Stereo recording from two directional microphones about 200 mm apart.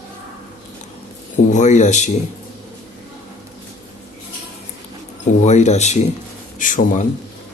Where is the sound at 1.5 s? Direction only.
35° left (ahead or behind).